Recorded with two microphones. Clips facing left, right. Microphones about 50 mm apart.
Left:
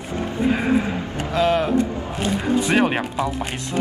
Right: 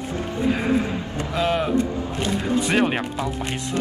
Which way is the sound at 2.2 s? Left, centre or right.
Centre.